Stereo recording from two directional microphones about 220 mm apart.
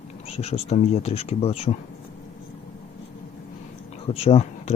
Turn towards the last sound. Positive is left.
turn(degrees=30)  # may be behind; listen again after turning